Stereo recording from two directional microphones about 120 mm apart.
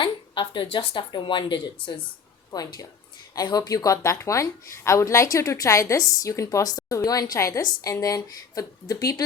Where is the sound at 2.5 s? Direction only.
30° left (ahead or behind).